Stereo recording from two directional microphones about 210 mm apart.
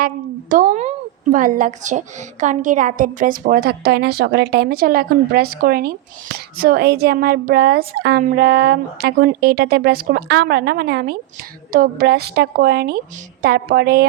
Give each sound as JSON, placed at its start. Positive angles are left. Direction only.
{"t": 0.5, "sound": "speech", "side_deg": -40}